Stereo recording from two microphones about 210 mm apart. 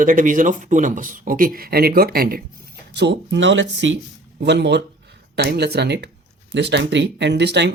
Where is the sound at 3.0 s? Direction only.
55° right (ahead or behind).